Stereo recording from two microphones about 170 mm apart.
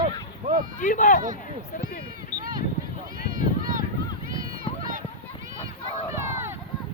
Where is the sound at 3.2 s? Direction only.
55° right (ahead or behind).